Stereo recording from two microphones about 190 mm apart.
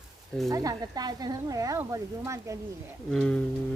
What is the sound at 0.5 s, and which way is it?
Speech, 20° right (ahead or behind).